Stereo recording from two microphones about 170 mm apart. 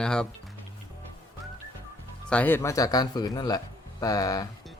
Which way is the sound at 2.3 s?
10° left (ahead or behind).